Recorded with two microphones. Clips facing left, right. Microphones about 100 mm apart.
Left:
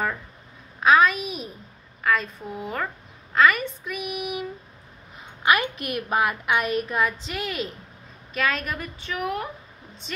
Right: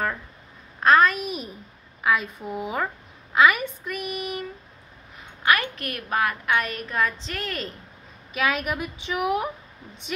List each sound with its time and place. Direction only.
0.7 s a child's voice: 5° left (ahead or behind)
8.3 s a woman's voice: 10° right (ahead or behind)